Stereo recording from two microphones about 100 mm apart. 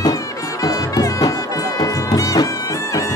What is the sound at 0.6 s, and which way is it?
Music, 35° left (ahead or behind).